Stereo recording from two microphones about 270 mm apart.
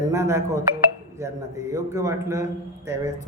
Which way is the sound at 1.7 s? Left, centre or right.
Centre.